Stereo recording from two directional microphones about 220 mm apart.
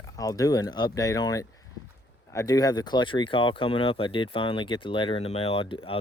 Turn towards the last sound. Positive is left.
turn(degrees=25)  # may be behind; listen again after turning